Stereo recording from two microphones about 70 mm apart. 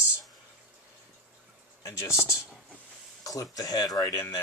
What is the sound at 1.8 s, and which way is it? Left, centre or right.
Speech, left.